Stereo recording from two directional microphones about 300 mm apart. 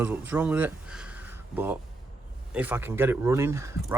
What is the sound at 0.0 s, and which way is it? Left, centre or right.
Speech, centre.